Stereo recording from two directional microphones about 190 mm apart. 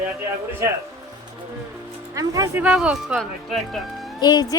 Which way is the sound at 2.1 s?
20° right (ahead or behind).